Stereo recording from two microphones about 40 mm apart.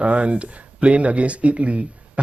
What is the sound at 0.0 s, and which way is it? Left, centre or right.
Speech, right.